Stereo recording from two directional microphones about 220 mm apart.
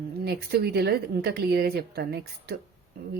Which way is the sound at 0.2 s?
45° right (ahead or behind).